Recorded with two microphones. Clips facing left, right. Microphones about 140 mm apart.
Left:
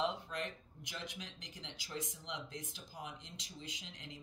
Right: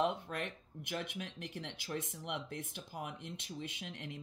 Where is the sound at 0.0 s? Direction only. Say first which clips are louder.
Right 3 dB; 55° right (ahead or behind).